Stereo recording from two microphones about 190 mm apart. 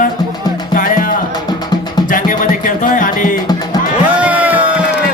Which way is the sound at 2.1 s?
45° left (ahead or behind).